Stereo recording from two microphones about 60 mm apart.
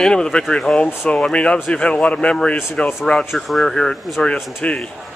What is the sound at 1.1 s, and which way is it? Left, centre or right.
A woman's voice, centre.